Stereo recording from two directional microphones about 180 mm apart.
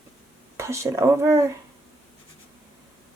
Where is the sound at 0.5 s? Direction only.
15° right (ahead or behind).